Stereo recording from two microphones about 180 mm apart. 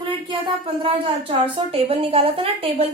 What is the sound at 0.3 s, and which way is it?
Speech, 30° right (ahead or behind).